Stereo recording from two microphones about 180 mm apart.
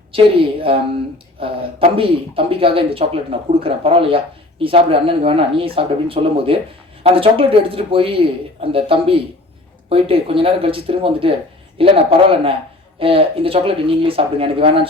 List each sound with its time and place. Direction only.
0.1 s speech: 30° right (ahead or behind)